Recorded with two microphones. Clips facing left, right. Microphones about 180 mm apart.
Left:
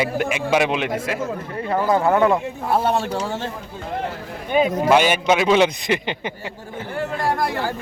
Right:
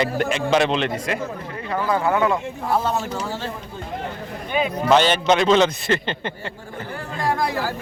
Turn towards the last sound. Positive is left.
turn(degrees=15)  # may be behind; listen again after turning